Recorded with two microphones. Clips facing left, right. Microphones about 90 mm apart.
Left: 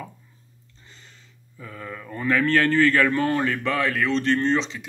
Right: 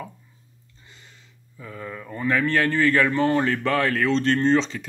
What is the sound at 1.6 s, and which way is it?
Speech, 20° right (ahead or behind).